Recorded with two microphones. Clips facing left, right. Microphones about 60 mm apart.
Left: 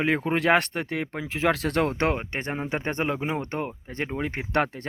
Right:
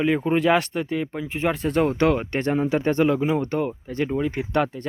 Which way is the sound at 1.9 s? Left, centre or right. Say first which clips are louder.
Right 5 dB; left.